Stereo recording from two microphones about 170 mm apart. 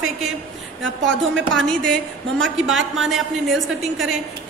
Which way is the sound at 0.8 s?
90° right.